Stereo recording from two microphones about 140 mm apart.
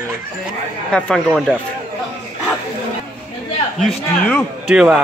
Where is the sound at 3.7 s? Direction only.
Centre (ahead or behind).